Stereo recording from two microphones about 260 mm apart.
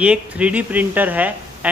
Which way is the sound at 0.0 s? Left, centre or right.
Centre.